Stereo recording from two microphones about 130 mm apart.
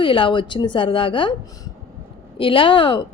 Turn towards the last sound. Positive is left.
turn(degrees=40)  # may be behind; listen again after turning